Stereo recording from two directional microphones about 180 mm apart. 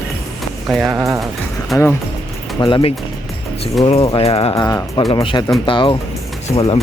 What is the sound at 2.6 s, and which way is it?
Speech, 25° left (ahead or behind).